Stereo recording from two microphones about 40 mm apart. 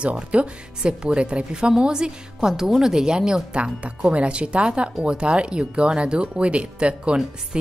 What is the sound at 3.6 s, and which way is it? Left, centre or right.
Speech, right.